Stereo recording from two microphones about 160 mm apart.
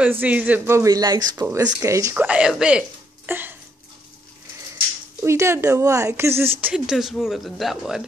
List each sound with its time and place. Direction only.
0.0 s speech: 10° right (ahead or behind)
2.2 s speech: 5° right (ahead or behind)
3.3 s a sound: 10° right (ahead or behind)
5.2 s speech: 15° right (ahead or behind); by 8.0 s centre (ahead or behind)